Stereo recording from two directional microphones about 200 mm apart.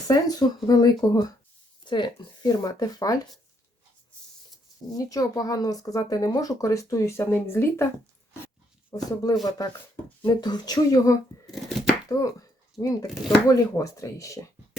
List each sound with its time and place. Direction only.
0.1 s speech: 20° left (ahead or behind)
4.9 s speech: 15° left (ahead or behind)
12.8 s speech: 20° left (ahead or behind)